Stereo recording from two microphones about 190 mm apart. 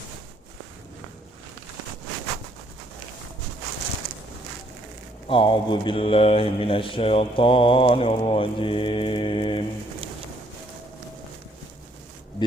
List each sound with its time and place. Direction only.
5.3 s mantra: 25° left (ahead or behind)